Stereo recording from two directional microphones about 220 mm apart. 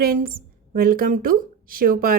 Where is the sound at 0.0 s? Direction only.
40° right (ahead or behind).